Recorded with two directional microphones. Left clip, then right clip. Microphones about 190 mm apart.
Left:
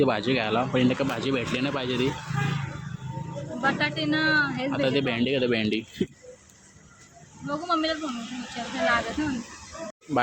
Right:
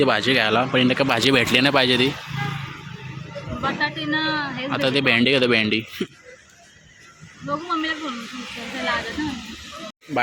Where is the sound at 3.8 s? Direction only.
25° left (ahead or behind).